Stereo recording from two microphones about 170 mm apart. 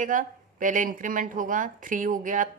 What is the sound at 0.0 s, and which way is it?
A woman's voice, 50° right (ahead or behind).